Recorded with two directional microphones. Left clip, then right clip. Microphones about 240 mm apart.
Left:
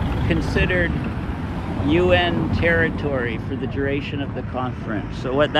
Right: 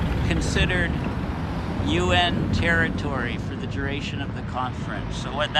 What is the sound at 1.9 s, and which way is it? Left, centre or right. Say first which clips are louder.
Speech: left 4 dB; centre.